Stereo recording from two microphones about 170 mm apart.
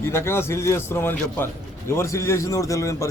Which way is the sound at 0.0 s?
15° left (ahead or behind).